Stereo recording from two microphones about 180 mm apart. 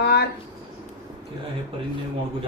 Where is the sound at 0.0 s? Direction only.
65° left (ahead or behind).